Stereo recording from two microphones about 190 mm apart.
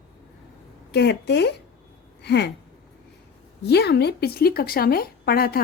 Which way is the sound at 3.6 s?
60° left (ahead or behind).